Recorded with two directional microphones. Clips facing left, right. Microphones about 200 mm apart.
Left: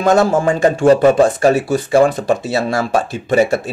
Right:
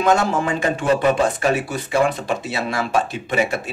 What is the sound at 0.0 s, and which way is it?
Speech, 40° left (ahead or behind).